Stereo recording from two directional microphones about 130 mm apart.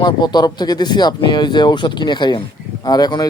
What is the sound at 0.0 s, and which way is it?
Speech, 35° left (ahead or behind).